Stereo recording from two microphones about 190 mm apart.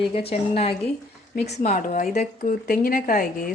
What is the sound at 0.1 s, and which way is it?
A woman's voice, 30° left (ahead or behind).